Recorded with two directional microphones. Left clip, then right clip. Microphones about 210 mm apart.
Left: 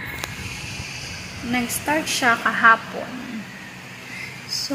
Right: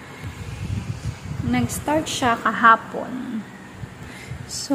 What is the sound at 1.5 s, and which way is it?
A woman's voice, 15° right (ahead or behind).